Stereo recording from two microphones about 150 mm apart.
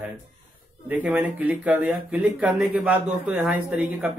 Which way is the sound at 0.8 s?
10° right (ahead or behind).